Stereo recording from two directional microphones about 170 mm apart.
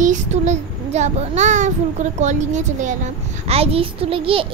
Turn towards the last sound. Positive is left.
turn(degrees=-35)  # may be behind; listen again after turning